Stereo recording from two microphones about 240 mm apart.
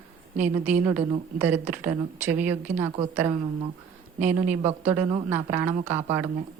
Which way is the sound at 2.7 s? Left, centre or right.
Right.